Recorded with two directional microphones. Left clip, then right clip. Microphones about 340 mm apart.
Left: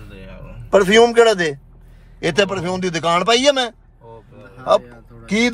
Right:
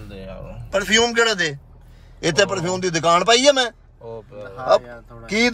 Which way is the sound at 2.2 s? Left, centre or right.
Left.